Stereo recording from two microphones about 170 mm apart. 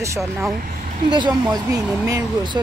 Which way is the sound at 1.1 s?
25° right (ahead or behind).